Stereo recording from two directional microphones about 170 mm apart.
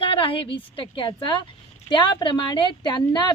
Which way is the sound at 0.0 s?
30° left (ahead or behind).